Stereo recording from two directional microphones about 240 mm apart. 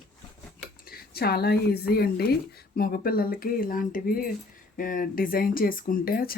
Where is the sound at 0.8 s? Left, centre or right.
Left.